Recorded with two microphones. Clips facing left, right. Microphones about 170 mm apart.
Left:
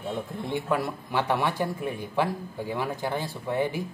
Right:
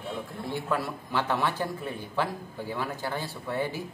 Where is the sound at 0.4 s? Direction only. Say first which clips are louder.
Left 2 dB; 20° left (ahead or behind).